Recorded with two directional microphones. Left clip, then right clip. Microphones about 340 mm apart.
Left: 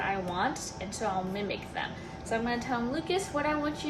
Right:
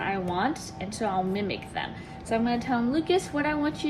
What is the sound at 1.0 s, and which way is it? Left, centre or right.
A woman's voice, right.